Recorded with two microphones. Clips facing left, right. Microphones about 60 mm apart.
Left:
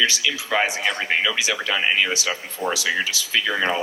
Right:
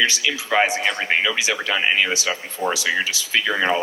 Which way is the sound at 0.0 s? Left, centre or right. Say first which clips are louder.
Right 1 dB; right.